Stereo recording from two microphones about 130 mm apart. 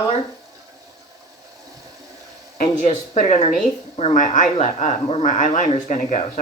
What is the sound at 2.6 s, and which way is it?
Speech, 70° left (ahead or behind).